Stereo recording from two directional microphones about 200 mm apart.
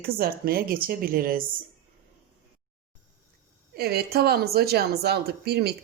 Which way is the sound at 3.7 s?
50° right (ahead or behind).